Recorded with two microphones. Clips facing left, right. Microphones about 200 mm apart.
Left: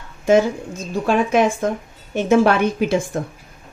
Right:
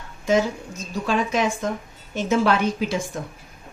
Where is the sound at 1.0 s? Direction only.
55° left (ahead or behind).